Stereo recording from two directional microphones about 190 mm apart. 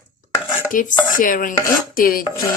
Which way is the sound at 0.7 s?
45° left (ahead or behind).